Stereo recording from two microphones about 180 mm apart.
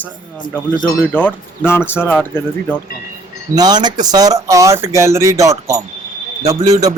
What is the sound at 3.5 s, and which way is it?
Speech, 25° right (ahead or behind).